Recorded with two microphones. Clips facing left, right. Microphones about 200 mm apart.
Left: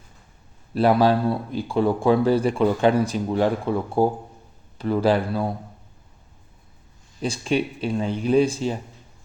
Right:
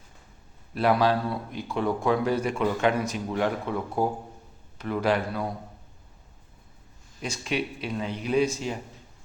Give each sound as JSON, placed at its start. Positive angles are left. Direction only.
{"t": 0.7, "sound": "speech", "side_deg": 30}
{"t": 7.2, "sound": "speech", "side_deg": 30}